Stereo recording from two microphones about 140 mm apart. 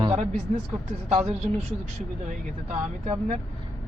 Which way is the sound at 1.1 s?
50° right (ahead or behind).